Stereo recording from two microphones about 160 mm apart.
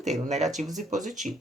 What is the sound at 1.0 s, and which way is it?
Speech, 50° right (ahead or behind).